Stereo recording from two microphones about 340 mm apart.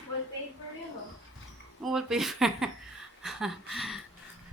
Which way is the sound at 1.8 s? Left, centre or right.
Centre.